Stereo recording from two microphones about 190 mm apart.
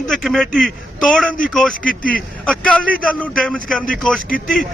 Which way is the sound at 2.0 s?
50° left (ahead or behind).